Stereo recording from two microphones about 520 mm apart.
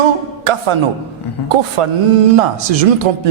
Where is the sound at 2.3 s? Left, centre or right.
Right.